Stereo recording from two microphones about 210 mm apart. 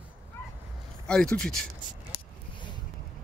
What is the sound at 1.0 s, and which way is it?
Speech, 5° left (ahead or behind).